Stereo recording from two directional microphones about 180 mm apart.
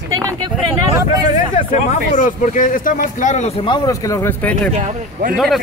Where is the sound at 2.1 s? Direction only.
45° left (ahead or behind).